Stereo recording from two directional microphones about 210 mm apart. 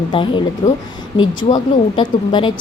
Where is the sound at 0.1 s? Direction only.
25° left (ahead or behind).